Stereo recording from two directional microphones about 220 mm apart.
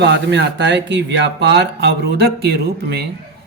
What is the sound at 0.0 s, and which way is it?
Speech, 55° right (ahead or behind).